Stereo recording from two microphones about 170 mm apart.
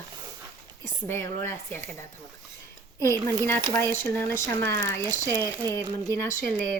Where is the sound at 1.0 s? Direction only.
15° left (ahead or behind).